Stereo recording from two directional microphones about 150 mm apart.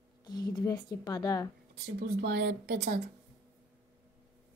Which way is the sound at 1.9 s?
90° right.